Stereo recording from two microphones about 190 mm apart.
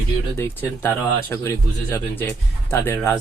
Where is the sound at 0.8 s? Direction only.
10° left (ahead or behind).